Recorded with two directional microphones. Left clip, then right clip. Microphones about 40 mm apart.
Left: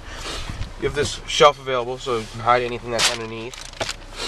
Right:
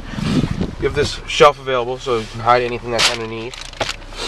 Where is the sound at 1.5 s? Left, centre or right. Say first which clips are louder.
Right 4 dB; centre.